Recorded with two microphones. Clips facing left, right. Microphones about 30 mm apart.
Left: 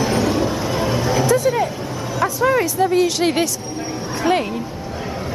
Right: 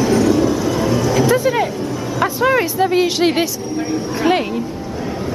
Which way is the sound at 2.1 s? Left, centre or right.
Right.